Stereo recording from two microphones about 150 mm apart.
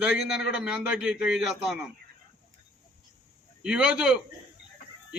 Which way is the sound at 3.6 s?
5° right (ahead or behind).